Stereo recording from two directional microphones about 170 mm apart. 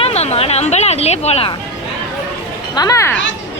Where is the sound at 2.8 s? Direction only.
20° left (ahead or behind).